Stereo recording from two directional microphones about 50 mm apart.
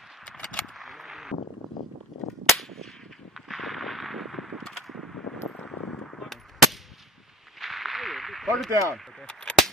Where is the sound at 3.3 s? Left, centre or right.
Centre.